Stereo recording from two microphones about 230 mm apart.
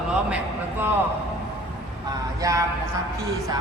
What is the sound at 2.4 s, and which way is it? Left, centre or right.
Speech, centre.